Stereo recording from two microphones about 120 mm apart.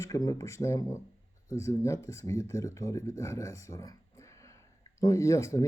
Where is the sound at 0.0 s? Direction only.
25° left (ahead or behind).